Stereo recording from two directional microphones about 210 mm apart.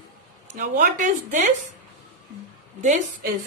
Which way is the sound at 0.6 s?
40° right (ahead or behind).